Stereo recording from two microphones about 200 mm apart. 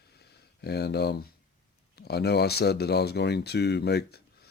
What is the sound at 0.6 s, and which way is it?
Speech, 55° left (ahead or behind).